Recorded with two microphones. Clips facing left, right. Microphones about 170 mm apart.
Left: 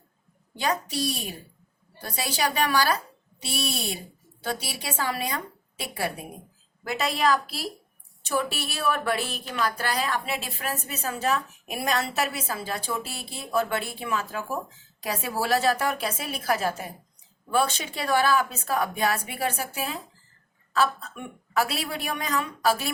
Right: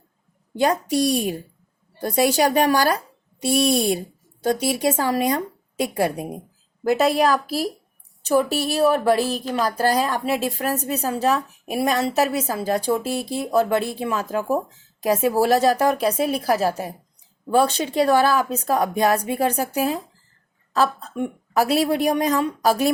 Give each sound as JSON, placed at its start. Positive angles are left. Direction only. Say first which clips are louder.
{"t": 0.6, "sound": "a woman's voice", "louder": "right 8 dB", "side_deg": -50}